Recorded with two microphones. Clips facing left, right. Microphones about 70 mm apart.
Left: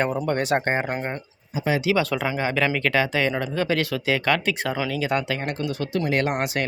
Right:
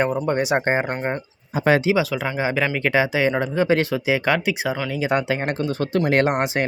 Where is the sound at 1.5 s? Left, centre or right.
Right.